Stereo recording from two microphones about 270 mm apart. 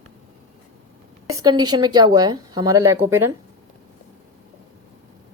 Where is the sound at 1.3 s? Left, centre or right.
Centre.